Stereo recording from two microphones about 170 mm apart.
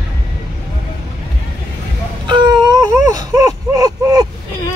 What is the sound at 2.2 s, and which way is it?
Baby cry, 25° right (ahead or behind).